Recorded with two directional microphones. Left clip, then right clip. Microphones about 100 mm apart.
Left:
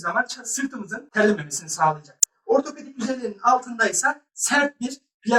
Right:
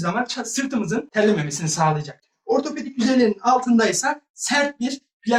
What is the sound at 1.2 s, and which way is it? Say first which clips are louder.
Speech: right 1 dB; 25° right (ahead or behind).